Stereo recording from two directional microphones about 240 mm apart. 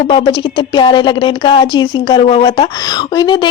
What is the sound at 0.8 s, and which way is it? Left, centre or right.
Speech, centre.